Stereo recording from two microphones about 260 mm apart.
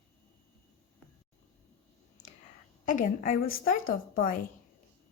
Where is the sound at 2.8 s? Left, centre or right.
Left.